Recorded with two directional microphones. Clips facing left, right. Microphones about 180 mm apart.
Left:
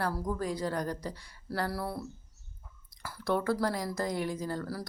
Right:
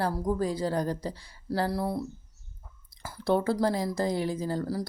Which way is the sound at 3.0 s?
25° right (ahead or behind).